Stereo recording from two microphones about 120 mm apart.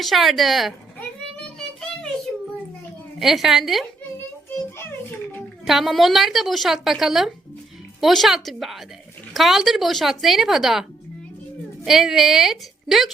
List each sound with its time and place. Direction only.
0.0 s a woman's voice: centre (ahead or behind)
3.2 s a woman's voice: centre (ahead or behind)
4.4 s a sound: 15° left (ahead or behind)
5.6 s a woman's voice: centre (ahead or behind)
11.9 s a woman's voice: centre (ahead or behind)